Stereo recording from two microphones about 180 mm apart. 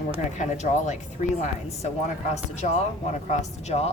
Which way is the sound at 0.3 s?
40° left (ahead or behind).